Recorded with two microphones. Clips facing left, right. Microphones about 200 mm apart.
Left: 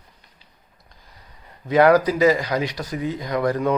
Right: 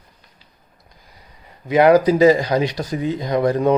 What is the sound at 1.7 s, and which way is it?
Speech, 20° right (ahead or behind).